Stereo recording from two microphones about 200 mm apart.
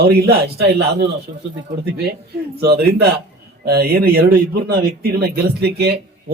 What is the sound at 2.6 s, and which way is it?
Speech, 50° right (ahead or behind).